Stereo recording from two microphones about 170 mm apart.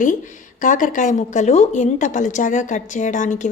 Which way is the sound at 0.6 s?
50° left (ahead or behind).